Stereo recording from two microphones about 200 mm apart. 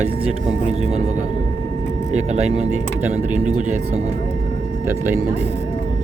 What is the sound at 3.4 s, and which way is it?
Speech, 35° right (ahead or behind).